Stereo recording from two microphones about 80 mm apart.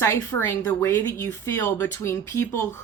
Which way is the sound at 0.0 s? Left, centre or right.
Left.